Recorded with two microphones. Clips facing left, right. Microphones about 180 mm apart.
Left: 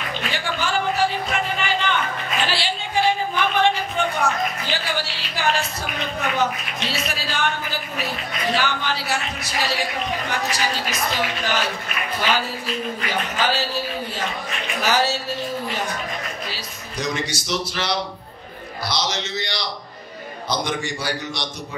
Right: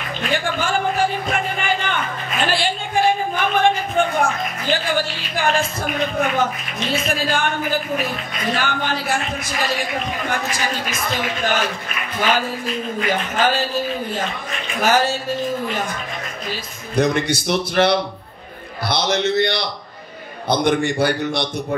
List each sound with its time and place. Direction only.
0.3 s a sound: 50° right (ahead or behind)
6.1 s speech: 50° right (ahead or behind)
13.4 s speech: 50° right (ahead or behind)
16.9 s a man's voice: 55° right (ahead or behind)